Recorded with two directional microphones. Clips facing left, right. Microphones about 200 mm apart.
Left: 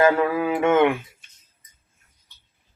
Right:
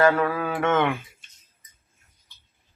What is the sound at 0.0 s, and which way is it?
Mantra, 15° left (ahead or behind).